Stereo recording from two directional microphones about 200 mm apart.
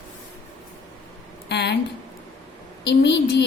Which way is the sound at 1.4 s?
55° left (ahead or behind).